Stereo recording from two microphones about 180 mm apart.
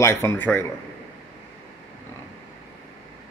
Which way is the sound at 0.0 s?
15° left (ahead or behind).